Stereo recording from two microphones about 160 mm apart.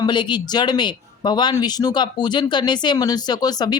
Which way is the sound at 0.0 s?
30° left (ahead or behind).